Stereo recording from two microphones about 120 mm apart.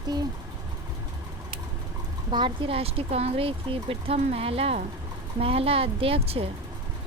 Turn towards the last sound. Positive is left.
turn(degrees=-50)  # may be behind; listen again after turning